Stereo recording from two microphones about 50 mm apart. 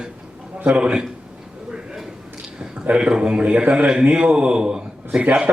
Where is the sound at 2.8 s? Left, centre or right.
Right.